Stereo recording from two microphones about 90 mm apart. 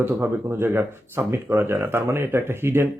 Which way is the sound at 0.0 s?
25° right (ahead or behind).